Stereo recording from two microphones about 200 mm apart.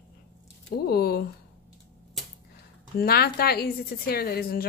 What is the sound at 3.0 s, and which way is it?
Speech, 50° left (ahead or behind).